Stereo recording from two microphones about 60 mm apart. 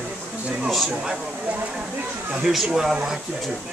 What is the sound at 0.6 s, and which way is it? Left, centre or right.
Speech, centre.